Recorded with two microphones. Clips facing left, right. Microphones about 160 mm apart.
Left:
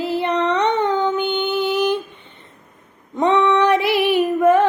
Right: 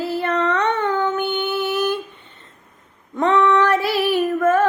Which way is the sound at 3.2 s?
20° left (ahead or behind).